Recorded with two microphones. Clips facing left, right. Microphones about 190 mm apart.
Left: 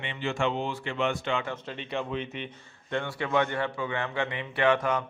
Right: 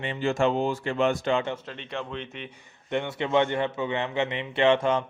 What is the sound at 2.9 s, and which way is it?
A man's voice, 20° right (ahead or behind).